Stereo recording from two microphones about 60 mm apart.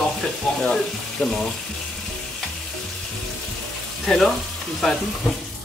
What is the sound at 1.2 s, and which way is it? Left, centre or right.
Speech, centre.